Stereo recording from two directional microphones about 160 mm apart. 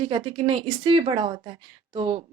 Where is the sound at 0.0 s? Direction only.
35° right (ahead or behind).